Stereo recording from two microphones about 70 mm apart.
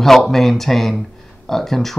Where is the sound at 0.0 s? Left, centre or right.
Centre.